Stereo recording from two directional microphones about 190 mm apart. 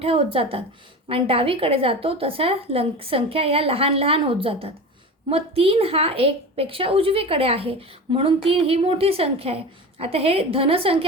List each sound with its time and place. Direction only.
0.0 s a woman's voice: 30° right (ahead or behind)